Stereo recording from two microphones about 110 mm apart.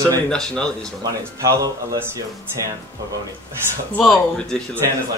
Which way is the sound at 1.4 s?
30° right (ahead or behind).